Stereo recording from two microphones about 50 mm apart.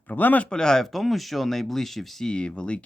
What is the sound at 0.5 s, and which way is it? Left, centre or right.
Speech, centre.